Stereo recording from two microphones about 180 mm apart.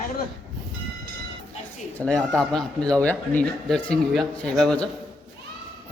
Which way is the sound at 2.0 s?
5° left (ahead or behind).